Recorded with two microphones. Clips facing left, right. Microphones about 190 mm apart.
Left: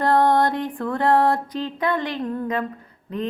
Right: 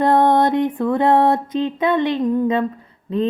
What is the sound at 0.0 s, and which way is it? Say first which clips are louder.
Music: right 3 dB; 20° right (ahead or behind).